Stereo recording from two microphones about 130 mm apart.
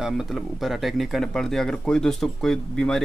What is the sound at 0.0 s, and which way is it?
Speech, 5° right (ahead or behind).